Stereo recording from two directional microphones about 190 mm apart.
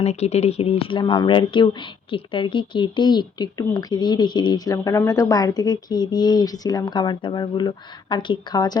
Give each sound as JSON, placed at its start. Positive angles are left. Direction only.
{"t": 0.0, "sound": "speech", "side_deg": 35}